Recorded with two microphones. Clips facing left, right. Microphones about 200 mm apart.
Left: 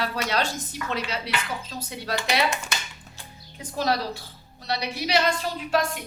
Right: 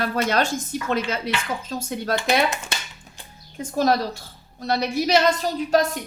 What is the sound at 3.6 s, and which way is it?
A woman's voice, 45° right (ahead or behind).